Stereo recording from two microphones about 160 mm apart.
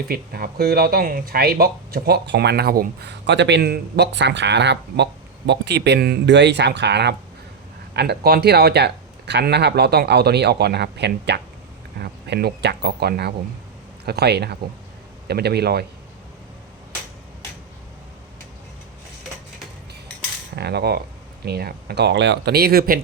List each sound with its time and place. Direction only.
0.1 s speech: 70° right (ahead or behind); by 11.3 s 90° right
12.0 s speech: 80° right
20.6 s speech: 90° right; by 23.0 s 70° right (ahead or behind)